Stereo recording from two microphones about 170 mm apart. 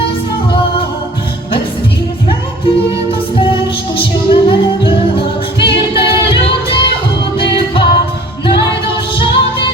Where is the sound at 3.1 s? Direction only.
30° left (ahead or behind).